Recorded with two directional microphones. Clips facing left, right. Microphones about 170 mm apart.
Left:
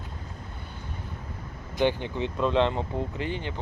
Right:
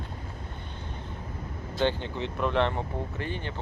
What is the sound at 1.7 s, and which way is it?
Speech, 15° left (ahead or behind).